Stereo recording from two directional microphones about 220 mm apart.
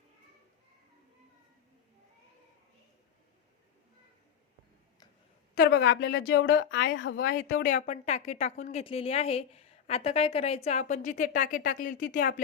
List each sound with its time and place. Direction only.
5.6 s speech: 60° left (ahead or behind)
7.5 s a woman's voice: 35° left (ahead or behind)